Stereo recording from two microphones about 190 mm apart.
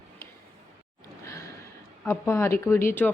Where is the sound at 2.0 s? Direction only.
15° left (ahead or behind).